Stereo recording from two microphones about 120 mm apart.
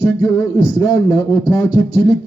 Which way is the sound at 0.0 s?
25° left (ahead or behind).